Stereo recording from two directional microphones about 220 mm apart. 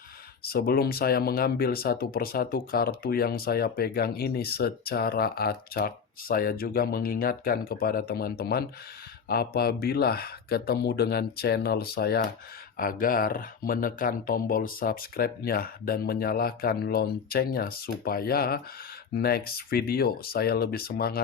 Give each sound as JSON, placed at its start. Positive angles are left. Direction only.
{"t": 0.4, "sound": "speech", "side_deg": 45}